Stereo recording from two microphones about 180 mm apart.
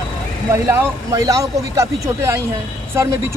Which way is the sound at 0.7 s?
15° right (ahead or behind).